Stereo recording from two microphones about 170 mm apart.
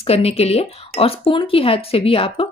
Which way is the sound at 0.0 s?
35° left (ahead or behind).